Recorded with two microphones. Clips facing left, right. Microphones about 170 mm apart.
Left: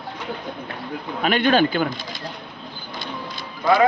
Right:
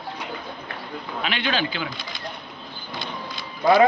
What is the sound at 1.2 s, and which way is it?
Speech, 50° left (ahead or behind).